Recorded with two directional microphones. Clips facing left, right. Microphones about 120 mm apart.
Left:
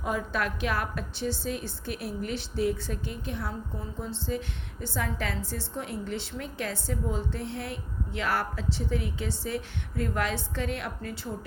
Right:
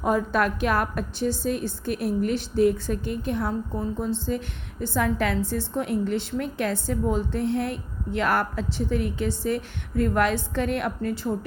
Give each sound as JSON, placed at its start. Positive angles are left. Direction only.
{"t": 0.0, "sound": "a woman's voice", "side_deg": -45}